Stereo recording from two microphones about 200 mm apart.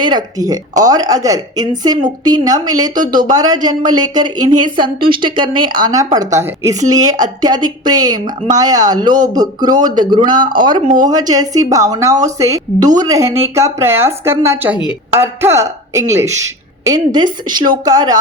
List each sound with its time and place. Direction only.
0.0 s a woman's voice: 20° right (ahead or behind)
3.0 s speech: 40° right (ahead or behind)
3.3 s a woman's voice: 20° right (ahead or behind)